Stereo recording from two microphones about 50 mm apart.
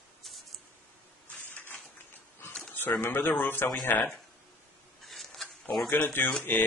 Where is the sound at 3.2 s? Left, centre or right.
Left.